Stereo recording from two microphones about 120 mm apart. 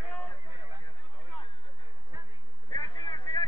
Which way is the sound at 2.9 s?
40° left (ahead or behind).